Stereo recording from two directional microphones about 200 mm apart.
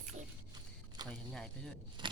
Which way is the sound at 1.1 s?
5° left (ahead or behind).